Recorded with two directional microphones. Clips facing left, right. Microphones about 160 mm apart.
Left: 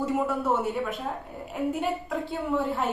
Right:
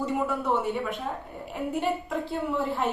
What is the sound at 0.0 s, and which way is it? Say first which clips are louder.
A woman's voice: left 1 dB; centre (ahead or behind).